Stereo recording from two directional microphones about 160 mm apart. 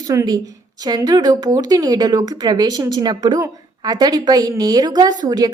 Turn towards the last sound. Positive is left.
turn(degrees=-25)  # may be behind; listen again after turning